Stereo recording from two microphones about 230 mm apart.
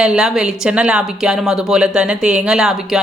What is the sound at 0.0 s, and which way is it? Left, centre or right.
A woman's voice, centre.